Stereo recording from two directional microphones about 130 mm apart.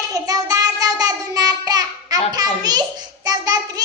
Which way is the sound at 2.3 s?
30° right (ahead or behind).